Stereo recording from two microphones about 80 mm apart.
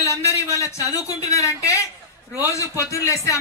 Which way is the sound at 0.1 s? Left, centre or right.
Left.